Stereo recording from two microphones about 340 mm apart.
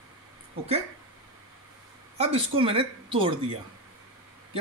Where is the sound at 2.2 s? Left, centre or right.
Centre.